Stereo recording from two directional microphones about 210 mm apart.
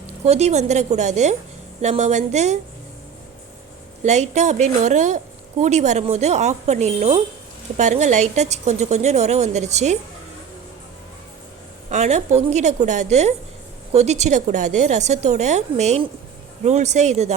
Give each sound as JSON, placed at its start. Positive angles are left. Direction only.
{"t": 0.3, "sound": "a woman's voice", "side_deg": -30}
{"t": 4.0, "sound": "a woman's voice", "side_deg": -35}
{"t": 11.9, "sound": "a woman's voice", "side_deg": -35}